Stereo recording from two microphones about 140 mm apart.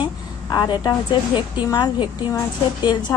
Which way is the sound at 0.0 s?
35° left (ahead or behind).